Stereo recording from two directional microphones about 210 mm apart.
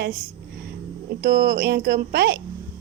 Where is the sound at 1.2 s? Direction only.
45° right (ahead or behind).